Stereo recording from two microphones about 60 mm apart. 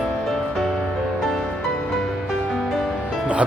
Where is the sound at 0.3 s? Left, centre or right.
Centre.